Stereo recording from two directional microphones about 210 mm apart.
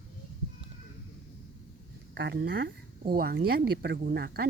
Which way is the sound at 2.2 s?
55° right (ahead or behind).